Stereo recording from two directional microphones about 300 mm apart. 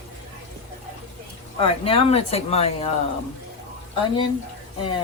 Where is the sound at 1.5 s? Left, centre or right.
Centre.